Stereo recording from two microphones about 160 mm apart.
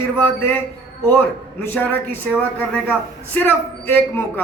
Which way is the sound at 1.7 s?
15° left (ahead or behind).